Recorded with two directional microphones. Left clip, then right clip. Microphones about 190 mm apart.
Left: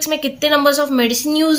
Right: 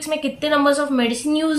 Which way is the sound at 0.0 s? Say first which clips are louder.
Left 4 dB; 60° left (ahead or behind).